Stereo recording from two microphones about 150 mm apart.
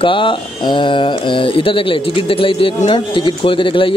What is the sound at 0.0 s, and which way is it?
Speech, 35° left (ahead or behind).